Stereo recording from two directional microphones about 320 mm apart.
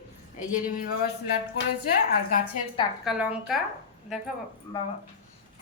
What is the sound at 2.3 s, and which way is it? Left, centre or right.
Speech, left.